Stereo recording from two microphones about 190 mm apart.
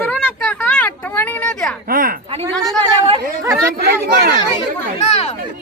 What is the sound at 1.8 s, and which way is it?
Speech, 50° right (ahead or behind).